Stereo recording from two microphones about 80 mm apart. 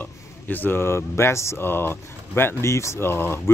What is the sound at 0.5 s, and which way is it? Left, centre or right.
Speech, left.